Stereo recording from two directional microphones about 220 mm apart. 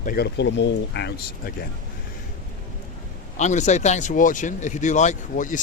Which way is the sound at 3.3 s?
30° left (ahead or behind).